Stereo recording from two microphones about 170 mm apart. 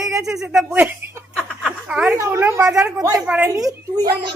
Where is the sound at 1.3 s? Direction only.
5° left (ahead or behind).